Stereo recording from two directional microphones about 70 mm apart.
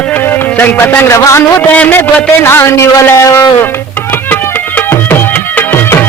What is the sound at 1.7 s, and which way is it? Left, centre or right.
Speech, left.